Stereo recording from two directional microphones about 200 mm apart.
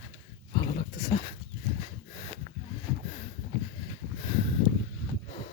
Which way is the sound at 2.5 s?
40° right (ahead or behind).